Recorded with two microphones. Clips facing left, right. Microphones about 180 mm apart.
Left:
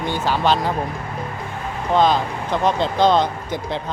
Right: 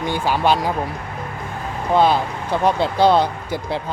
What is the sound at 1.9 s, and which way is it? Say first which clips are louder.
Speech: right 1 dB; 10° right (ahead or behind).